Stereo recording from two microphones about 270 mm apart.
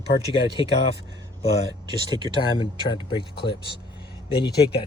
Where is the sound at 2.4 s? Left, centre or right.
Centre.